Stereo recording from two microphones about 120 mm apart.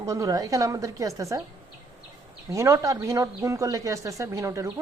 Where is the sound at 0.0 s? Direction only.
25° right (ahead or behind).